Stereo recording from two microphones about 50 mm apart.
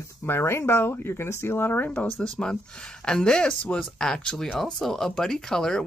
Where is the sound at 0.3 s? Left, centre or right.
Left.